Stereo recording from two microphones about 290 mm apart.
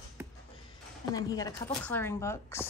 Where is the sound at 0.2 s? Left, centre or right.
Centre.